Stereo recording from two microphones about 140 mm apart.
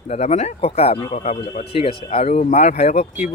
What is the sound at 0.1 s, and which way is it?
Speech, 50° left (ahead or behind).